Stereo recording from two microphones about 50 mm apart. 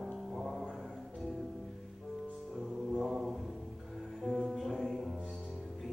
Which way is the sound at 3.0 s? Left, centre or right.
Centre.